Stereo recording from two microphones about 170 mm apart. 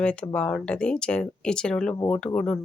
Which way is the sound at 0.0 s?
5° left (ahead or behind).